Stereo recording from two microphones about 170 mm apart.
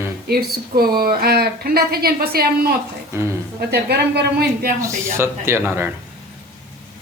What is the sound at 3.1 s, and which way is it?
Speech, 15° right (ahead or behind).